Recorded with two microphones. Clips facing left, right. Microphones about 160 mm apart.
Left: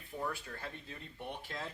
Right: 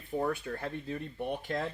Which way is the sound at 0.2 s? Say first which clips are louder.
Right 8 dB; 55° right (ahead or behind).